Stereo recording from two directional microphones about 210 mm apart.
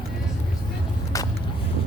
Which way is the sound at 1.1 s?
15° left (ahead or behind).